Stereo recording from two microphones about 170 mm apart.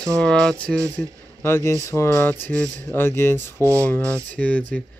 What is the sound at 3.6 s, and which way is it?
Speech, 15° right (ahead or behind).